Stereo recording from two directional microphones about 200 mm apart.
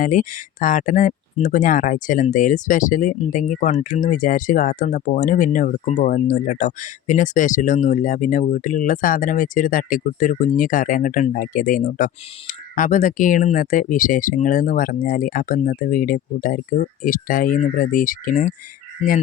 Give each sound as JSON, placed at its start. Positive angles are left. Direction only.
{"t": 0.0, "sound": "speech", "side_deg": 40}